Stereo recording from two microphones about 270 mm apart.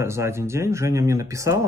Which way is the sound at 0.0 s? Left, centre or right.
Centre.